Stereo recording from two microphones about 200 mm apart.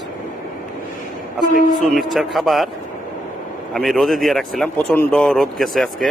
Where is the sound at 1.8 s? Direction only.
Centre (ahead or behind).